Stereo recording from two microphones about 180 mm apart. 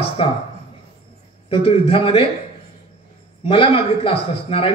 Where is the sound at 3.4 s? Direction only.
30° left (ahead or behind).